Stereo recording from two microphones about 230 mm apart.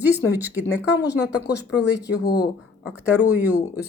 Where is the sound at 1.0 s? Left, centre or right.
Left.